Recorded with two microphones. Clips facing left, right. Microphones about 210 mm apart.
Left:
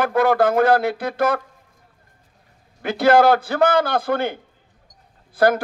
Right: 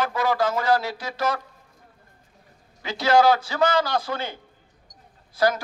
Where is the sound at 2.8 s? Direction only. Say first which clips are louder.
Left 4 dB; 55° left (ahead or behind).